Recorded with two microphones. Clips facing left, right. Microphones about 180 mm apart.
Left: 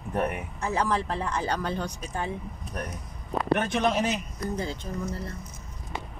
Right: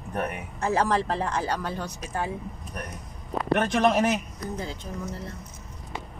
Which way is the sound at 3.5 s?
75° right (ahead or behind).